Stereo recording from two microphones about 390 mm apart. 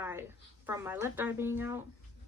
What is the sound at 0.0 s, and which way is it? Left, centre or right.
A woman's voice, centre.